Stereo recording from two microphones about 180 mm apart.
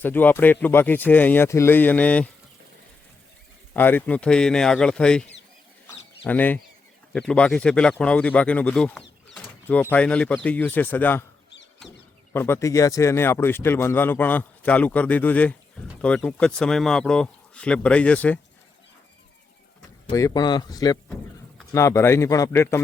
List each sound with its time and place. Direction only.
0.0 s speech: 10° left (ahead or behind)
3.8 s speech: 10° left (ahead or behind)
6.2 s speech: 10° left (ahead or behind)
12.3 s speech: 15° left (ahead or behind)
20.1 s speech: 20° left (ahead or behind)